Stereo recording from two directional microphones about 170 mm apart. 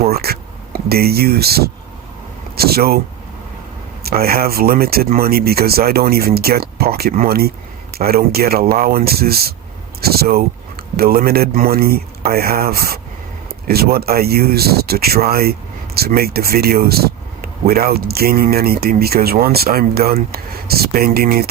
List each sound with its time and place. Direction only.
0.0 s speech: 65° right (ahead or behind)
4.0 s speech: 65° right (ahead or behind)